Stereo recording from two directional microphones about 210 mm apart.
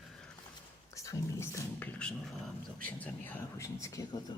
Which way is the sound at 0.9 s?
15° left (ahead or behind).